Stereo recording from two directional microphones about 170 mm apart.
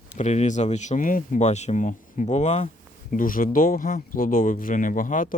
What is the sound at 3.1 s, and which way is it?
Speech, 55° left (ahead or behind).